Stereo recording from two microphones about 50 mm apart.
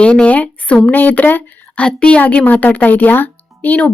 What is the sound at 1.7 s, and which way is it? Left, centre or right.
A woman's voice, left.